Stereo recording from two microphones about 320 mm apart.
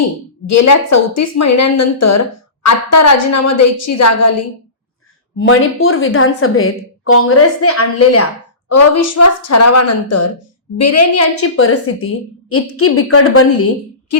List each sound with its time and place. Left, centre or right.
0.4 s a woman's voice: left
5.4 s a woman's voice: left